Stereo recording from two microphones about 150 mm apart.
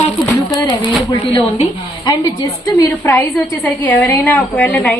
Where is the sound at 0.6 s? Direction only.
30° left (ahead or behind).